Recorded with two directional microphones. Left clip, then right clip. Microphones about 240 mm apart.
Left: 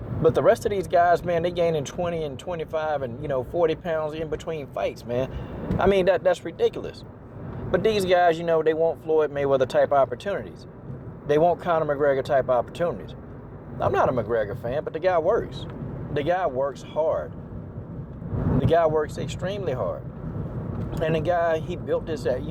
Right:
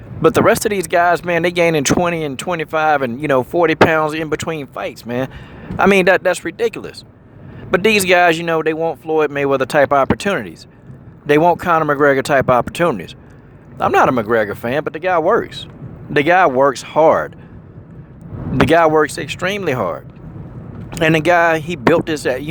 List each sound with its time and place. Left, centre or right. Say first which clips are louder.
0.2 s speech: right 7 dB; right
18.6 s speech: right 10 dB; right